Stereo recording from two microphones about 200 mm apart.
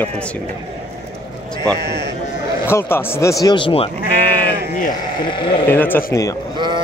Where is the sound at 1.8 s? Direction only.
55° right (ahead or behind).